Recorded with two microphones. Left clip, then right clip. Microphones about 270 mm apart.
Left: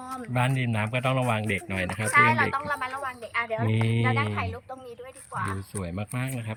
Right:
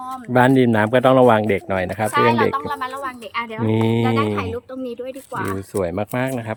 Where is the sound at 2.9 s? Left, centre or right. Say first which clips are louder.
Right 5 dB; right.